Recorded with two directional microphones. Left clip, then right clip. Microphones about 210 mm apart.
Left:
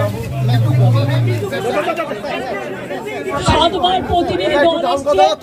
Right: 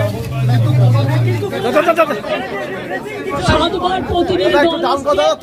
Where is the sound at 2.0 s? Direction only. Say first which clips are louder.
Right 8 dB; 50° right (ahead or behind).